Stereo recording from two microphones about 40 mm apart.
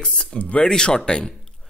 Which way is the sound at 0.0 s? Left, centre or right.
Left.